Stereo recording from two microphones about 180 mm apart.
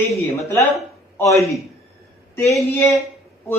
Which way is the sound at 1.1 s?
15° left (ahead or behind).